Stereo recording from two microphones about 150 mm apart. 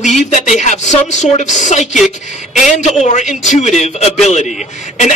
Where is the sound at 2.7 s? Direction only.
50° left (ahead or behind).